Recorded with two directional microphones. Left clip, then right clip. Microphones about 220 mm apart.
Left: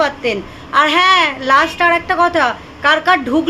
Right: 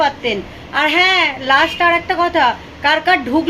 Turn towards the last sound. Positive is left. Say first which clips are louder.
# left 1 dB
turn(degrees=15)  # may be behind; listen again after turning